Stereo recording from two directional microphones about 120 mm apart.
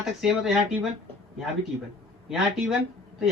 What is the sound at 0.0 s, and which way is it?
Speech, centre (ahead or behind).